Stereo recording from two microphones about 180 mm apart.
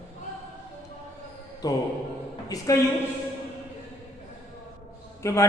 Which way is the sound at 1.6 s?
20° left (ahead or behind).